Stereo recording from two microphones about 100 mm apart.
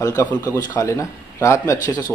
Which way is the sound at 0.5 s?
35° left (ahead or behind).